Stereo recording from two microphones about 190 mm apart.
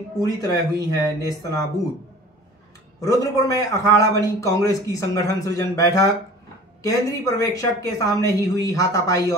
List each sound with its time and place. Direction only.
0.2 s speech: 20° left (ahead or behind)
3.0 s a man's voice: 20° left (ahead or behind)